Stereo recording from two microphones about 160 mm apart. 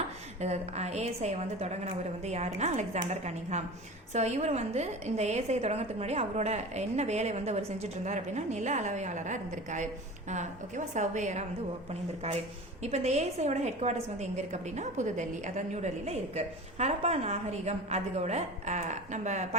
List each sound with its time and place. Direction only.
0.4 s a woman's voice: 45° right (ahead or behind)
12.8 s a woman's voice: 45° right (ahead or behind)